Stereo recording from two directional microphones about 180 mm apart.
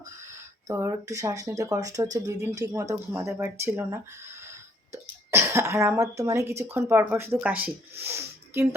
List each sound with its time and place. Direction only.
0.2 s speech: 15° right (ahead or behind)